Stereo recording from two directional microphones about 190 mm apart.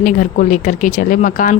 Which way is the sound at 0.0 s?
45° left (ahead or behind).